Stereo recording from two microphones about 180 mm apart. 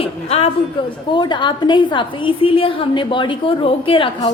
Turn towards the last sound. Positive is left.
turn(degrees=25)  # may be behind; listen again after turning